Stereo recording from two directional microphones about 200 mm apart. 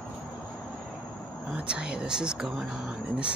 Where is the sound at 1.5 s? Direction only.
5° right (ahead or behind).